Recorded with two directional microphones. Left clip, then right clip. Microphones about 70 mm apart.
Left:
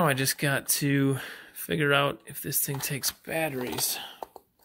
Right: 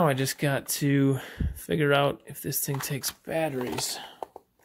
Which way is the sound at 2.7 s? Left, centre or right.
Right.